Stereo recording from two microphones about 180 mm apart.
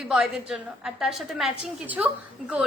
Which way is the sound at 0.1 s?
Centre (ahead or behind).